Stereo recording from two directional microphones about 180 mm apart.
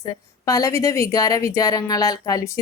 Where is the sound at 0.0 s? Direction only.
20° left (ahead or behind).